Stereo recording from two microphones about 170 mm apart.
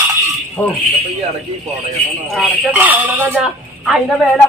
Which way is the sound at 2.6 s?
10° right (ahead or behind).